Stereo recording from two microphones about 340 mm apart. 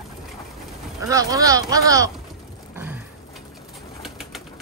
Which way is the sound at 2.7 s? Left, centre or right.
Centre.